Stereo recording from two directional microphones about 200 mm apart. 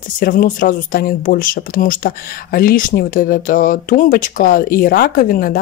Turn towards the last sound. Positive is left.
turn(degrees=45)  # may be behind; listen again after turning